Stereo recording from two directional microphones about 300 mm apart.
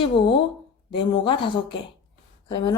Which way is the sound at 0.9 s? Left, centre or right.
Centre.